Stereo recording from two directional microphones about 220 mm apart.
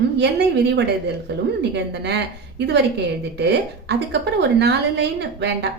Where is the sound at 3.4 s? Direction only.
50° right (ahead or behind).